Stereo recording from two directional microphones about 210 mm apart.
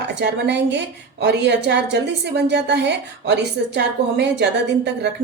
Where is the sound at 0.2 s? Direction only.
55° right (ahead or behind).